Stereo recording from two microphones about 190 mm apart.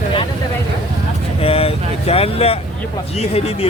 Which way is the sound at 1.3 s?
30° left (ahead or behind).